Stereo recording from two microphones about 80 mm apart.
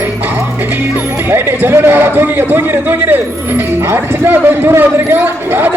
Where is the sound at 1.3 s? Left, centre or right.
Right.